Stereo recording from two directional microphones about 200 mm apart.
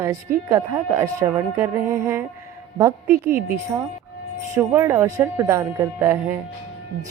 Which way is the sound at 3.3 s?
45° right (ahead or behind).